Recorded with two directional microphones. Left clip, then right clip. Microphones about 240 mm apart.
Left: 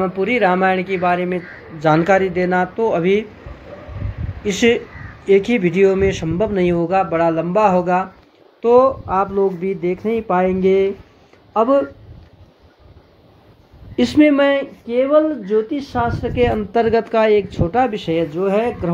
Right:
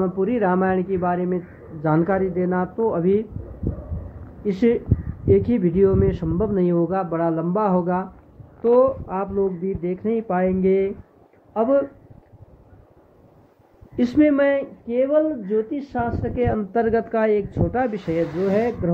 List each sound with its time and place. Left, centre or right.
0.0 s speech: centre
1.9 s speech: centre
4.5 s speech: centre
13.9 s speech: centre